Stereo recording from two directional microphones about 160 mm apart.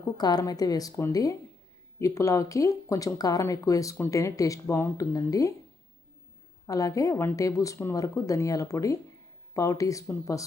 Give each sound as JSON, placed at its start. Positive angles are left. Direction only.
{"t": 0.2, "sound": "speech", "side_deg": 25}
{"t": 6.7, "sound": "speech", "side_deg": 20}